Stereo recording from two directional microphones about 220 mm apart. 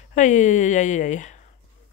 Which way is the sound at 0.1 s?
35° left (ahead or behind).